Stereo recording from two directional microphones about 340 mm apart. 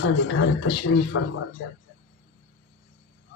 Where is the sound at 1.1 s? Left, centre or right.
Left.